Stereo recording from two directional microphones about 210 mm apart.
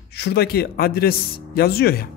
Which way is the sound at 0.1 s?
50° left (ahead or behind).